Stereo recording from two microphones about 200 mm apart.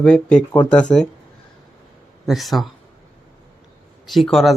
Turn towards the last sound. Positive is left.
turn(degrees=0)  # may be behind; listen again after turning